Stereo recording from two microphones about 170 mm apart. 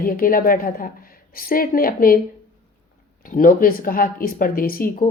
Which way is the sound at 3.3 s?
55° left (ahead or behind).